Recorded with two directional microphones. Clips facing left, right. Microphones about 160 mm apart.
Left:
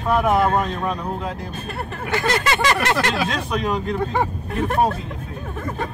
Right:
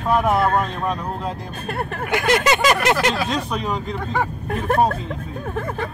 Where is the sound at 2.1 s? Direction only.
15° right (ahead or behind).